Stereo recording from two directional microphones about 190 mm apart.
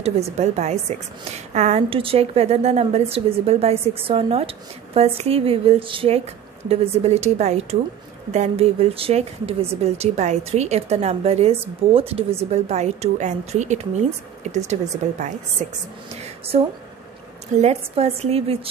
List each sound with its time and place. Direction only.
0.0 s speech: 35° right (ahead or behind)
16.1 s a sound: 30° right (ahead or behind)
17.6 s speech: 35° right (ahead or behind)